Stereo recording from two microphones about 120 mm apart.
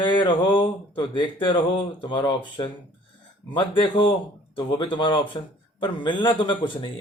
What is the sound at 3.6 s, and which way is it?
Speech, 40° left (ahead or behind).